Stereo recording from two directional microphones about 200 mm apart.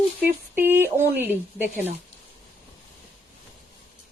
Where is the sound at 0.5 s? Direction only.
10° right (ahead or behind).